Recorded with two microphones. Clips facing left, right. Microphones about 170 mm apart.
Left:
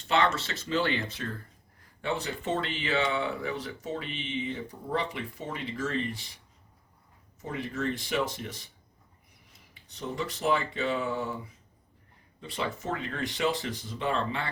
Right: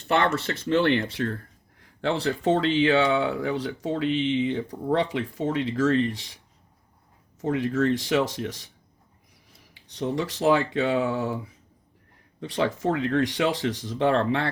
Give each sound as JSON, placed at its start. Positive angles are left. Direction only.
{"t": 0.1, "sound": "speech", "side_deg": -55}
{"t": 2.0, "sound": "speech", "side_deg": -90}
{"t": 7.4, "sound": "speech", "side_deg": -85}
{"t": 9.7, "sound": "speech", "side_deg": -90}
{"t": 12.4, "sound": "speech", "side_deg": -90}